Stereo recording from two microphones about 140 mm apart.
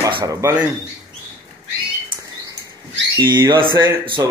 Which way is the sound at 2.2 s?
25° right (ahead or behind).